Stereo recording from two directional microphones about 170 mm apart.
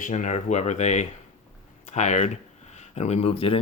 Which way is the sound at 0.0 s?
45° left (ahead or behind).